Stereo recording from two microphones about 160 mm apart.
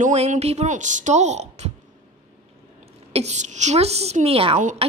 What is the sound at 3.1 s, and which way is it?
A woman's voice, 45° right (ahead or behind).